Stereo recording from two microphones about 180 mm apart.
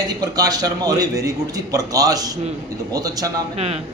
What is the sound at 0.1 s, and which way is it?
A man's voice, 20° right (ahead or behind).